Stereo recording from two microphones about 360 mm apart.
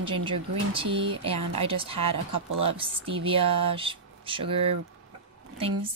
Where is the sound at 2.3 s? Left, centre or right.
Right.